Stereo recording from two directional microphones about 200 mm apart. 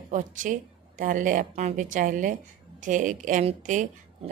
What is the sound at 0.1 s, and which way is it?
A woman's voice, 40° right (ahead or behind).